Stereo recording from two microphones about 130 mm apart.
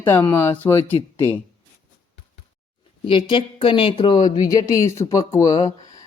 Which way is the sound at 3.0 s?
40° left (ahead or behind).